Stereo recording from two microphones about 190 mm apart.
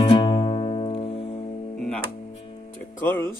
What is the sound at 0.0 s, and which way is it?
Music, 25° left (ahead or behind).